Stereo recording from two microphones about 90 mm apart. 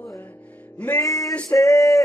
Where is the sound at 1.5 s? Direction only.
40° left (ahead or behind).